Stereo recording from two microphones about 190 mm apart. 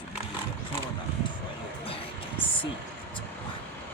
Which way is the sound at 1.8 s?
30° left (ahead or behind).